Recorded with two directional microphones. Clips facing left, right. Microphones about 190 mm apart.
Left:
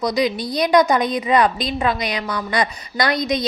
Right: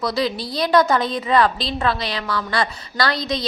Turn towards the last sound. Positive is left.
turn(degrees=20)  # may be behind; listen again after turning